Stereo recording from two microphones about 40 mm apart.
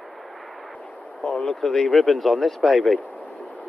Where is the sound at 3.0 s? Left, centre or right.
Right.